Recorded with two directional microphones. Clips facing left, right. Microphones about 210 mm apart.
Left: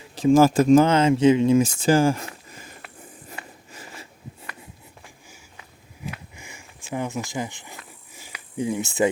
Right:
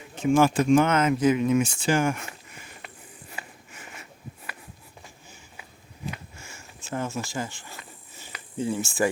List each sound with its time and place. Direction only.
0.2 s speech: 35° left (ahead or behind)
1.8 s a sound: 35° left (ahead or behind)
6.3 s sniff: 15° left (ahead or behind)
8.1 s cricket: 10° left (ahead or behind)